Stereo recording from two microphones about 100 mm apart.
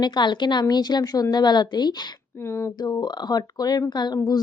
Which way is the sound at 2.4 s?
25° left (ahead or behind).